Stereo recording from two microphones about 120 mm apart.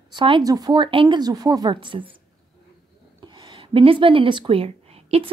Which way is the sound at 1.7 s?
45° right (ahead or behind).